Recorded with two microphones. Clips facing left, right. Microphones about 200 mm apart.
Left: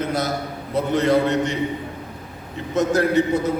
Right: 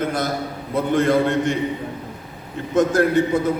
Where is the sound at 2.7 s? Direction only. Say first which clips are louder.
Right 2 dB; 50° right (ahead or behind).